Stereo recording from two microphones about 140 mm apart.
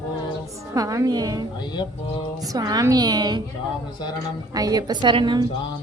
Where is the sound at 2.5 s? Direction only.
25° right (ahead or behind).